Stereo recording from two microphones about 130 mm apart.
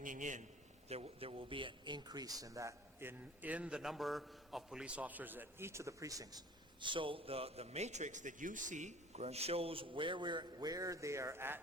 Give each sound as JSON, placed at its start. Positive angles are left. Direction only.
{"t": 0.0, "sound": "a man's voice", "side_deg": -80}
{"t": 0.9, "sound": "a man's voice", "side_deg": -50}
{"t": 6.7, "sound": "a man's voice", "side_deg": -40}